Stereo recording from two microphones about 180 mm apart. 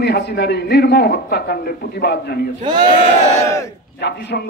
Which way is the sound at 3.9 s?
70° left (ahead or behind).